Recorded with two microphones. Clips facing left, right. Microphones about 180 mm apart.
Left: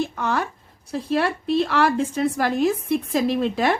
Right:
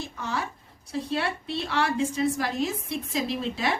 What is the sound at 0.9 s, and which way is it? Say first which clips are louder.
A woman's voice: left 6 dB; 50° left (ahead or behind).